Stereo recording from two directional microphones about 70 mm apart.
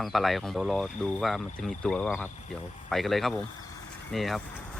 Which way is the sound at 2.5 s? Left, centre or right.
Centre.